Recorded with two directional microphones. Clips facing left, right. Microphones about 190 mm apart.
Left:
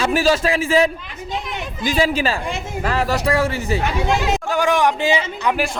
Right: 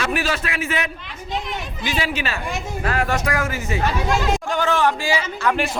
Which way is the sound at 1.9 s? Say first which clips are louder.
Left 7 dB; 35° left (ahead or behind).